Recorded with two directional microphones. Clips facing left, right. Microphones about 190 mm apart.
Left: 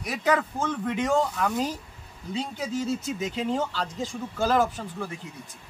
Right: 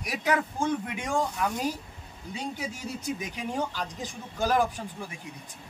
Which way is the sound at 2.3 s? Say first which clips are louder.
Left 6 dB; 15° right (ahead or behind).